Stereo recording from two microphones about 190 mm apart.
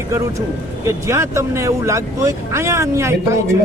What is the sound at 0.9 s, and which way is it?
Speech, 15° right (ahead or behind).